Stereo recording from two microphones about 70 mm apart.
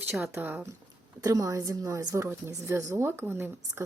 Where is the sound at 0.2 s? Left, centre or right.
Right.